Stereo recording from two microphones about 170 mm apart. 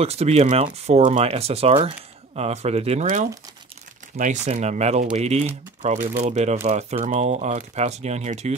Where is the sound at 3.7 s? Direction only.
45° right (ahead or behind).